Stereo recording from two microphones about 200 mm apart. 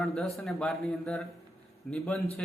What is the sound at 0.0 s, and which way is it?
Speech, centre (ahead or behind).